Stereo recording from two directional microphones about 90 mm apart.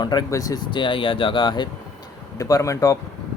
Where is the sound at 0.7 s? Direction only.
65° left (ahead or behind).